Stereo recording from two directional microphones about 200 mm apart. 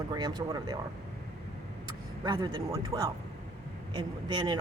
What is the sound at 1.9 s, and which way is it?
Speech, 20° right (ahead or behind).